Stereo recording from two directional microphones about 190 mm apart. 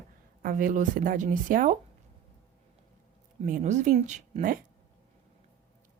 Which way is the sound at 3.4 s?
40° right (ahead or behind).